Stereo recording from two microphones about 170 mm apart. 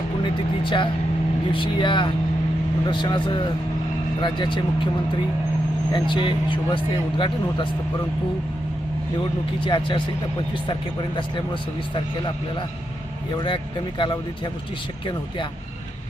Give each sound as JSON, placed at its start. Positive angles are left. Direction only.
{"t": 0.2, "sound": "a man's voice", "side_deg": 30}
{"t": 5.9, "sound": "a man's voice", "side_deg": 30}
{"t": 9.6, "sound": "a man's voice", "side_deg": 30}
{"t": 13.3, "sound": "a man's voice", "side_deg": 30}